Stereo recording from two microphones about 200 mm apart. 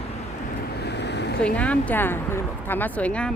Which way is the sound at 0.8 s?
60° left (ahead or behind).